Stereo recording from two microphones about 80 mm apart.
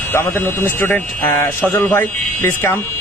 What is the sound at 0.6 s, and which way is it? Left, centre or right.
A man's voice, left.